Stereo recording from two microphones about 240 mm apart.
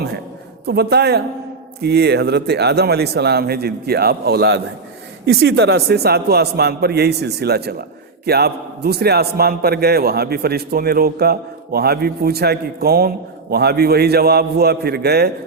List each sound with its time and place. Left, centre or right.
0.6 s a man's voice: right